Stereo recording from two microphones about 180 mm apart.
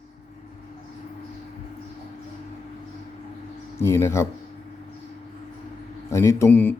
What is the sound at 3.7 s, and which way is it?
Speech, 15° left (ahead or behind).